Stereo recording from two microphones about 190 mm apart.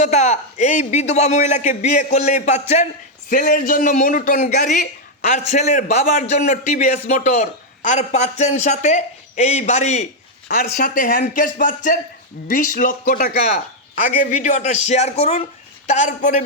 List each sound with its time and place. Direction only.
0.0 s a man's voice: 35° left (ahead or behind)